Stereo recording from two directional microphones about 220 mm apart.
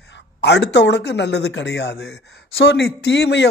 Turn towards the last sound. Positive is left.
turn(degrees=50)  # may be behind; listen again after turning